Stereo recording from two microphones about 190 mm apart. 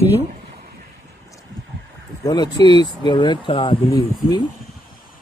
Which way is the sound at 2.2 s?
20° left (ahead or behind).